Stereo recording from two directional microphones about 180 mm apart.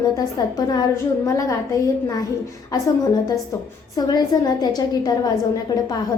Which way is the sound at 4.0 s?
20° left (ahead or behind).